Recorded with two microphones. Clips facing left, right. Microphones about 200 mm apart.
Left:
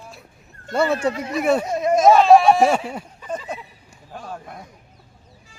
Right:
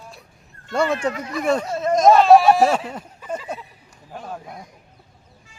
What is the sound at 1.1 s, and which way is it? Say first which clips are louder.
Speech: left 3 dB; 25° left (ahead or behind).